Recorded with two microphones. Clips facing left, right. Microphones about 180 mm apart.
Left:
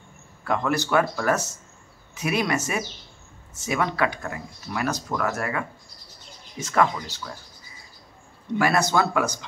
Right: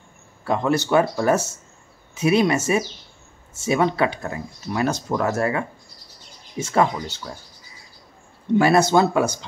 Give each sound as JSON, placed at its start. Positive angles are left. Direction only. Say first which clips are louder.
{"t": 0.5, "sound": "speech", "louder": "right 4 dB", "side_deg": -25}
{"t": 8.5, "sound": "speech", "louder": "right 6 dB", "side_deg": -25}